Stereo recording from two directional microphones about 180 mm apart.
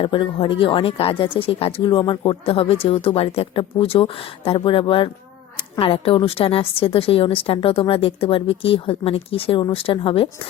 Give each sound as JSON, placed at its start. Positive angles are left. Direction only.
{"t": 0.0, "sound": "speech", "side_deg": 30}